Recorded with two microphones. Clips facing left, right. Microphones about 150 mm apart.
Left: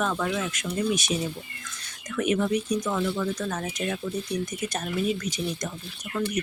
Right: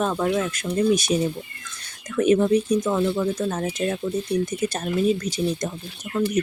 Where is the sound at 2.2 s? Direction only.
30° right (ahead or behind).